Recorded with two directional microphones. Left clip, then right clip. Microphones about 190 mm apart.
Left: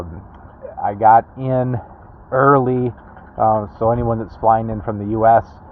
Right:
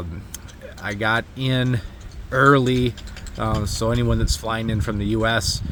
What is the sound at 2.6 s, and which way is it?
Speech, 15° right (ahead or behind).